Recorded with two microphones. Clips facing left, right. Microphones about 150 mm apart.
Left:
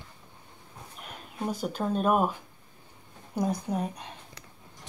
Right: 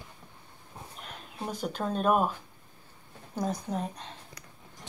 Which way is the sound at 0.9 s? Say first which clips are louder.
Left 4 dB; 5° left (ahead or behind).